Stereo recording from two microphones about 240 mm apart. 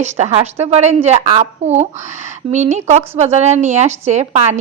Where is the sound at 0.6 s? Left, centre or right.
Right.